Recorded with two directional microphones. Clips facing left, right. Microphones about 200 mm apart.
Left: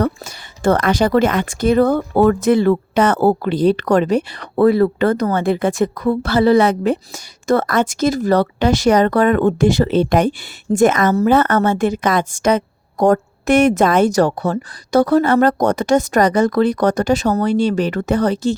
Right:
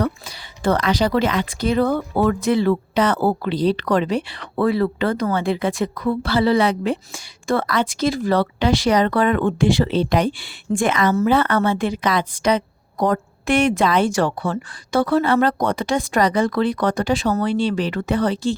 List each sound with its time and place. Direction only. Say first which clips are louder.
0.0 s speech: left 4 dB; 50° left (ahead or behind)